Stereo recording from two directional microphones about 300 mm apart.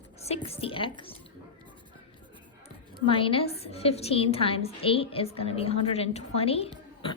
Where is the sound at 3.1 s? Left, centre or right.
Centre.